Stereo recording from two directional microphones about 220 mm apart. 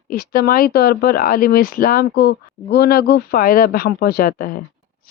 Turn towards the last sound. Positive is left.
turn(degrees=40)  # may be behind; listen again after turning